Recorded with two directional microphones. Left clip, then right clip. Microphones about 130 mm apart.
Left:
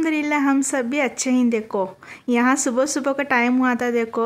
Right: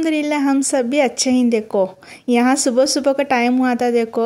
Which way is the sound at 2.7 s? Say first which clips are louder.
Right 5 dB; 25° right (ahead or behind).